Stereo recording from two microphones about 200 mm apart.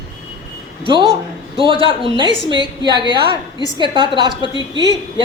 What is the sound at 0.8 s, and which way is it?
A woman's voice, 25° right (ahead or behind).